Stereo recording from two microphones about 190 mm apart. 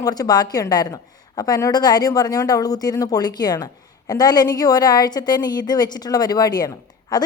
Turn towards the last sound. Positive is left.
turn(degrees=20)  # may be behind; listen again after turning